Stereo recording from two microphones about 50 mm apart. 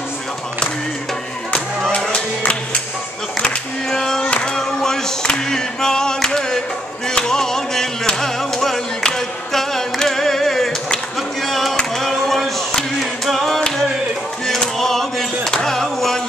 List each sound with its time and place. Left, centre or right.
2.1 s music: left
4.3 s singing: centre
6.2 s music: centre
9.0 s singing: centre
11.1 s a sound: centre
13.0 s a capella: centre
13.7 s a sound: centre
15.5 s music: centre